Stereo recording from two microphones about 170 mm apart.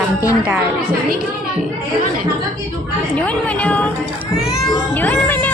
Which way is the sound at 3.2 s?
10° left (ahead or behind).